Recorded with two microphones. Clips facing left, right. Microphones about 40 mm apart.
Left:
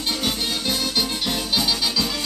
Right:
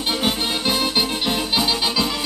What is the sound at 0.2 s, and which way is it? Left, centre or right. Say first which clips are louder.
Music: right 3 dB; right.